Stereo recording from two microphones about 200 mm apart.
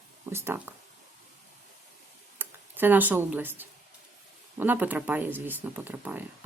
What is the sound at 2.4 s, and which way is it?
Speech, 10° right (ahead or behind).